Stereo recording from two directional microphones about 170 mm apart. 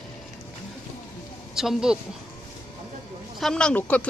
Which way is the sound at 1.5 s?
5° right (ahead or behind).